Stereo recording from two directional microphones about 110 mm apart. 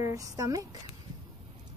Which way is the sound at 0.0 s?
30° right (ahead or behind).